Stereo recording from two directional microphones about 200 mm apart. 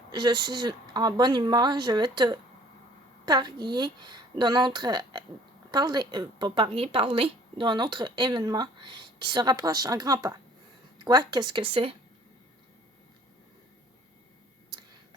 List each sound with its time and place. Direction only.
0.1 s a woman's voice: 20° right (ahead or behind)